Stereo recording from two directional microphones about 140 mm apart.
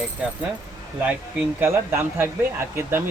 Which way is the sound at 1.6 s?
20° right (ahead or behind).